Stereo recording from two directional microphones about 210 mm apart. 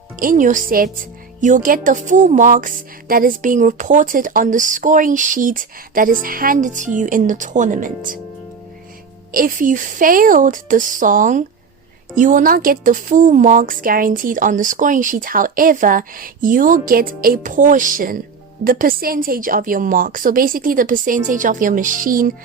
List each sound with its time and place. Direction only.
0.2 s speech: 40° right (ahead or behind)
9.3 s speech: 40° right (ahead or behind)